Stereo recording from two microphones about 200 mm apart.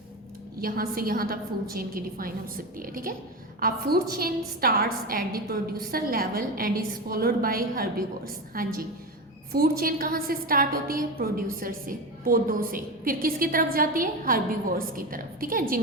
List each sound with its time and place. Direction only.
0.6 s a woman's voice: 45° right (ahead or behind)